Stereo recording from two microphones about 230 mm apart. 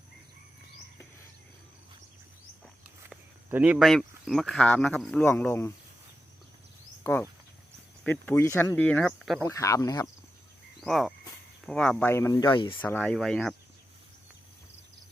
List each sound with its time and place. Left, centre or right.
3.1 s speech: centre
7.0 s speech: centre
9.4 s speech: centre
10.8 s speech: centre; by 12.8 s left
12.8 s speech: centre